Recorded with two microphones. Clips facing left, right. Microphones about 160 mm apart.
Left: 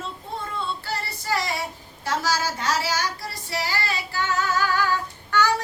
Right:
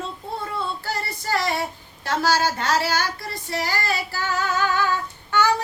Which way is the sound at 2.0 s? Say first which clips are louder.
Right 4 dB; 60° right (ahead or behind).